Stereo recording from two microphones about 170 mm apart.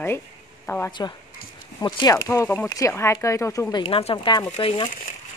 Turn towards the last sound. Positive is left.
turn(degrees=30)  # may be behind; listen again after turning